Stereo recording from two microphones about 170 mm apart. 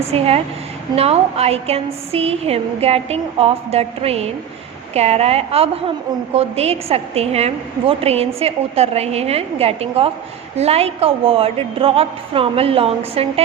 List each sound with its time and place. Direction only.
0.0 s a woman's voice: 35° right (ahead or behind)